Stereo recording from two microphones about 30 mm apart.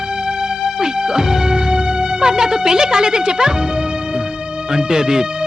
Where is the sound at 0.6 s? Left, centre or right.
Right.